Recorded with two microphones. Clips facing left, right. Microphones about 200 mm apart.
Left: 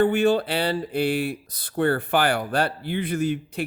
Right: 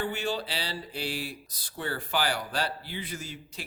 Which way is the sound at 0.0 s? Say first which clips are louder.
Left 12 dB; 55° left (ahead or behind).